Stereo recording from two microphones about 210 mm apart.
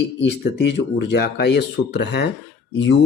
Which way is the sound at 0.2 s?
55° left (ahead or behind).